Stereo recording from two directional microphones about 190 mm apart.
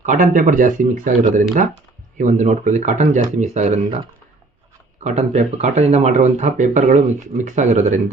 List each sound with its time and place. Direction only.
0.0 s speech: 40° right (ahead or behind)
5.0 s speech: 35° right (ahead or behind)